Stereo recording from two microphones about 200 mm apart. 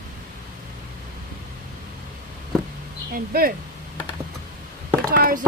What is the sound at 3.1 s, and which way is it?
Speech, 45° right (ahead or behind).